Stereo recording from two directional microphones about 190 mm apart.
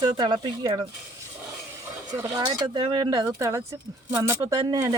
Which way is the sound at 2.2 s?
20° right (ahead or behind).